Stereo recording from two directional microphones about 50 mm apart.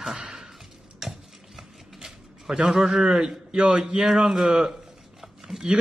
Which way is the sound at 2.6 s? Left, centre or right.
Centre.